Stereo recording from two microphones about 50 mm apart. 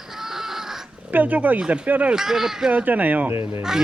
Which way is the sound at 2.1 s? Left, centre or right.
Centre.